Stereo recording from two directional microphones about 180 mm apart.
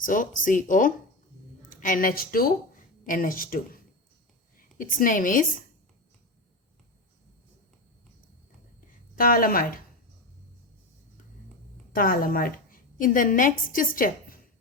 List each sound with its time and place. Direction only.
0.0 s a woman's voice: 45° left (ahead or behind)
9.1 s speech: 55° left (ahead or behind)
11.9 s a woman's voice: 55° left (ahead or behind)